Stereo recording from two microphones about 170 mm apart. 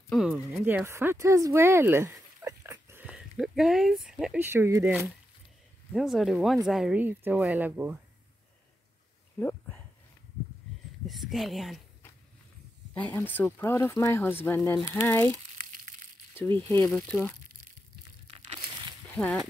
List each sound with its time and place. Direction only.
0.1 s speech: centre (ahead or behind)
5.9 s speech: centre (ahead or behind)
9.4 s speech: 10° left (ahead or behind)
11.1 s speech: centre (ahead or behind)
12.9 s speech: 10° left (ahead or behind)
16.3 s speech: 15° left (ahead or behind)
18.2 s crushing: 35° right (ahead or behind)
19.1 s speech: 5° left (ahead or behind)